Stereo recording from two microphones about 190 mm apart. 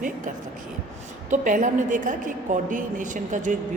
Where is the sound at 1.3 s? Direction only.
40° right (ahead or behind).